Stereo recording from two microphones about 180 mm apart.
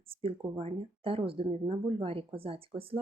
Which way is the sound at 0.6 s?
30° right (ahead or behind).